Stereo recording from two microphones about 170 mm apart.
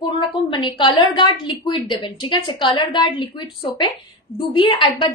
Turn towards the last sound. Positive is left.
turn(degrees=30)  # may be behind; listen again after turning